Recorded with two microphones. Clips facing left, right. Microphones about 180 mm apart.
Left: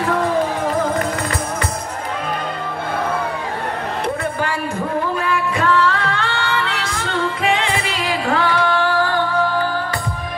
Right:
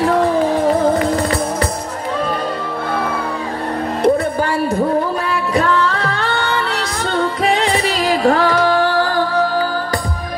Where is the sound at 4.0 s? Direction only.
35° right (ahead or behind).